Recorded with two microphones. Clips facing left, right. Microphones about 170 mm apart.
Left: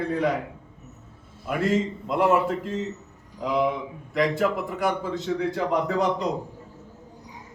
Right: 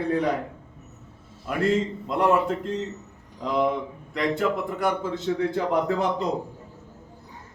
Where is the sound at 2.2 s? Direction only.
Centre (ahead or behind).